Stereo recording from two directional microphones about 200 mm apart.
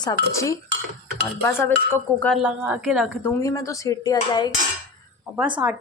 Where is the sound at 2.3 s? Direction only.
5° right (ahead or behind).